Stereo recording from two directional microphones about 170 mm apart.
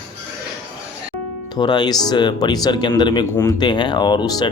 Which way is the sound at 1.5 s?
25° left (ahead or behind).